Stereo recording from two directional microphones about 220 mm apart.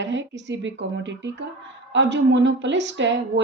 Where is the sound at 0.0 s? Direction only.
55° right (ahead or behind).